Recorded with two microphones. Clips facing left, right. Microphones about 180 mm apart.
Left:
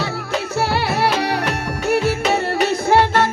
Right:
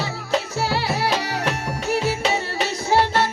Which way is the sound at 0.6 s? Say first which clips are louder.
Left 4 dB; 60° left (ahead or behind).